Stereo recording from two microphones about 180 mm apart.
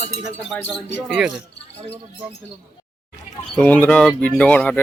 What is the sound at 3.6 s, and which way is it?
Speech, 5° left (ahead or behind).